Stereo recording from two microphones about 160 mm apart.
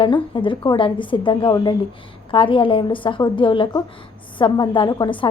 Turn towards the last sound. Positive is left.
turn(degrees=30)  # may be behind; listen again after turning